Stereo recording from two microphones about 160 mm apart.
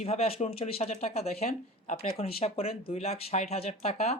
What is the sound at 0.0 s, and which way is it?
Speech, 40° left (ahead or behind).